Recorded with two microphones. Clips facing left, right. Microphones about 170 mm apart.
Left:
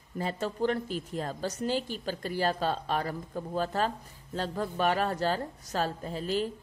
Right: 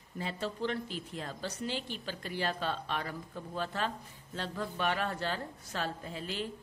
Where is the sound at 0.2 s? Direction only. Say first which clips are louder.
Left 5 dB; 45° left (ahead or behind).